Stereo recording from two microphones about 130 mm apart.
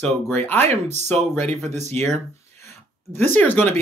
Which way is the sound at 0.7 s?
60° right (ahead or behind).